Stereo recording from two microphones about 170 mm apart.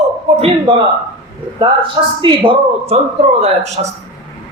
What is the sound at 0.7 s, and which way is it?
Speech, 25° right (ahead or behind).